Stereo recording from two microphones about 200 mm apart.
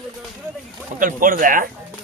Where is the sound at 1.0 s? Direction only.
40° right (ahead or behind).